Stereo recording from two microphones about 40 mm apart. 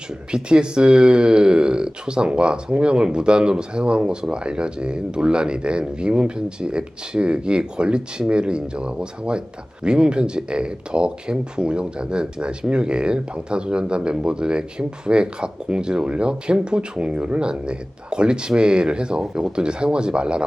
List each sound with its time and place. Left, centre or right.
0.3 s speech: right